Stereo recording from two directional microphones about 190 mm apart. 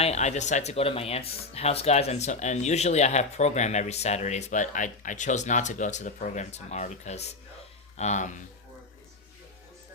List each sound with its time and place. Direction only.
0.0 s speech: 35° left (ahead or behind)